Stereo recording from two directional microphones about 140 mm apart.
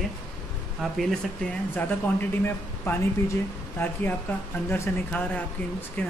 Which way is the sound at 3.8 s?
15° left (ahead or behind).